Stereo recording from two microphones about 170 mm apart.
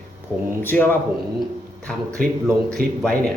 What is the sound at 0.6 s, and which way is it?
Speech, 10° left (ahead or behind).